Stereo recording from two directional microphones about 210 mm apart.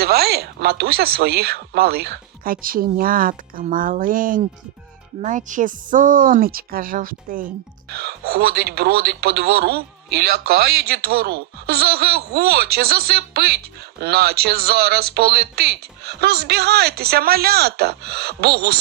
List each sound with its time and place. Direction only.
0.0 s a woman's voice: 50° right (ahead or behind)